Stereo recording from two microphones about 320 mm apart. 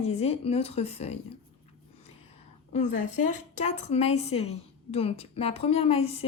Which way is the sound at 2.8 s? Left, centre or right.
Left.